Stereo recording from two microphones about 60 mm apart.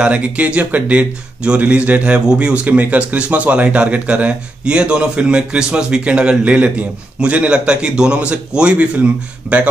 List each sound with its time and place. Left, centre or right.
0.0 s a man's voice: right